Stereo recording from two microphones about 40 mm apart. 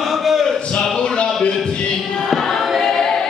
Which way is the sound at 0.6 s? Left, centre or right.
Left.